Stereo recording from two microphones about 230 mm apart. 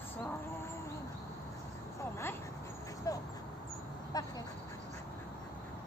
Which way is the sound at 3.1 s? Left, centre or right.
Centre.